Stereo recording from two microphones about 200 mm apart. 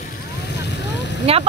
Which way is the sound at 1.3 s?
30° right (ahead or behind).